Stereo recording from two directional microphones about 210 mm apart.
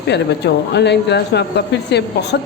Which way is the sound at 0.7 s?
55° left (ahead or behind).